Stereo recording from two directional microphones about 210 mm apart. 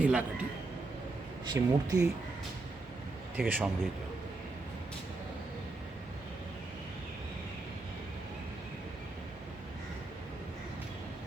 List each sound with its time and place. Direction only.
0.0 s a sound: 5° right (ahead or behind)
1.5 s speech: 15° right (ahead or behind)
3.3 s a man's voice: 5° right (ahead or behind)